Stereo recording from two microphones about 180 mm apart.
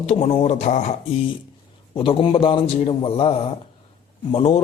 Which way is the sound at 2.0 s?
30° left (ahead or behind).